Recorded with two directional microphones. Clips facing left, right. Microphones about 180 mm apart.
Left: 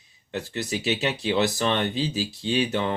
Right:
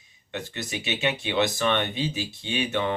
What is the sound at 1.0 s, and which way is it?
Speech, 35° left (ahead or behind).